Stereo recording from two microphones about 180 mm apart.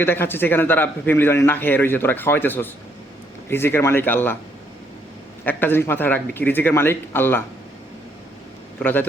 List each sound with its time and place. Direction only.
0.0 s a man's voice: 10° left (ahead or behind)
5.5 s a man's voice: 10° left (ahead or behind)
8.8 s a man's voice: 10° left (ahead or behind)